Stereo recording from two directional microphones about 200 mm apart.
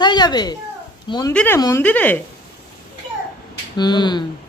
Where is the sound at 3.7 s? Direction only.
20° left (ahead or behind).